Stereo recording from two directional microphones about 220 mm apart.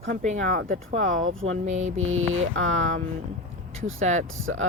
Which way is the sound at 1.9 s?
65° right (ahead or behind).